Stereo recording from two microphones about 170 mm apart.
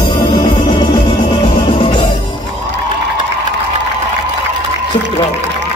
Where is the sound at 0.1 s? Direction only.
30° left (ahead or behind).